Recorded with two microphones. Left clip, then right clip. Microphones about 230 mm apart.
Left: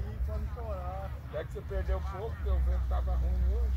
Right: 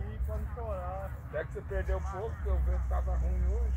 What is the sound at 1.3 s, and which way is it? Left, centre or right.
Speech, right.